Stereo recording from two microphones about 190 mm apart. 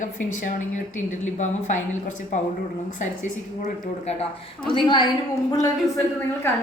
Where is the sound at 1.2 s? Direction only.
40° left (ahead or behind).